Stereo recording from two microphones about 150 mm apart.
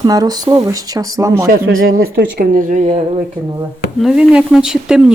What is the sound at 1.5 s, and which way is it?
Speech, 80° right.